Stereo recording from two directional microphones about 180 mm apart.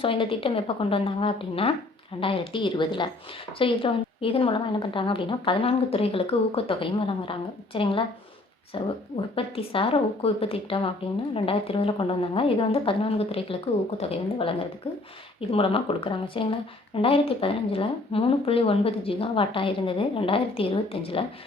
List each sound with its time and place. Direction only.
0.0 s a woman's voice: 30° left (ahead or behind)